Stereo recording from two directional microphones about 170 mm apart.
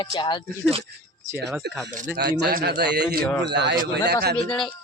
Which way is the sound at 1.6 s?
75° right (ahead or behind).